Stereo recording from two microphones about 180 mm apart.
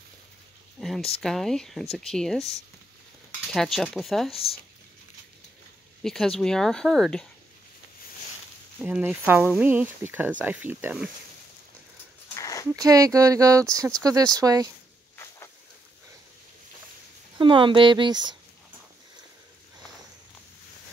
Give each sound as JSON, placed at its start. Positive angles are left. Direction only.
{"t": 0.7, "sound": "a sound", "side_deg": 0}
{"t": 1.2, "sound": "speech", "side_deg": 0}
{"t": 6.0, "sound": "speech", "side_deg": 5}
{"t": 8.7, "sound": "speech", "side_deg": -10}
{"t": 12.4, "sound": "dog", "side_deg": 20}
{"t": 12.7, "sound": "speech", "side_deg": -20}
{"t": 17.4, "sound": "speech", "side_deg": -25}